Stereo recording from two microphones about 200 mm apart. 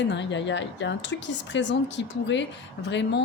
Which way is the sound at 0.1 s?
60° left (ahead or behind).